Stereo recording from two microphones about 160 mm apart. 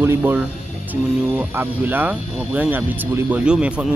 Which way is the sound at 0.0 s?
10° right (ahead or behind).